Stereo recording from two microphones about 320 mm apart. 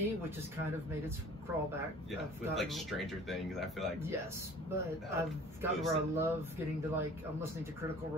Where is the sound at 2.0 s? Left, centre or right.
Centre.